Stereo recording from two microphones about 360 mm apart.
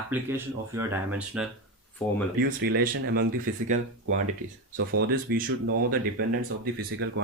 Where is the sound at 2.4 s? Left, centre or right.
Right.